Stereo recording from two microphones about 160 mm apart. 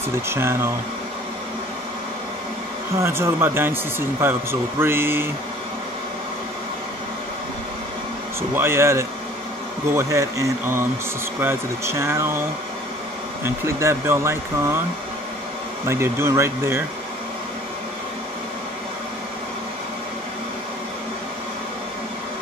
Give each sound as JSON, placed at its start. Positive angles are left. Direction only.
{"t": 0.1, "sound": "speech", "side_deg": -15}
{"t": 3.0, "sound": "speech", "side_deg": -15}
{"t": 8.4, "sound": "speech", "side_deg": -15}
{"t": 13.4, "sound": "speech", "side_deg": -15}
{"t": 15.9, "sound": "speech", "side_deg": -15}